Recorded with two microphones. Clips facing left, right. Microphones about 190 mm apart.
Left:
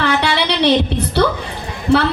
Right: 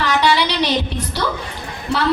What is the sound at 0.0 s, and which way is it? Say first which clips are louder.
Music: even; 60° left (ahead or behind).